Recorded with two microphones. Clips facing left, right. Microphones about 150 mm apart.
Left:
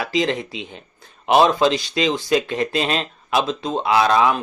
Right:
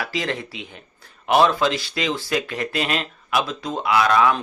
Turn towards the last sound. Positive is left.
turn(degrees=25)  # may be behind; listen again after turning